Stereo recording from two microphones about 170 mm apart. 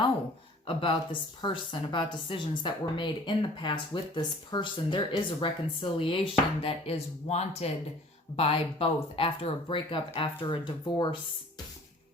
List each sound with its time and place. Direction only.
0.7 s speech: 30° left (ahead or behind)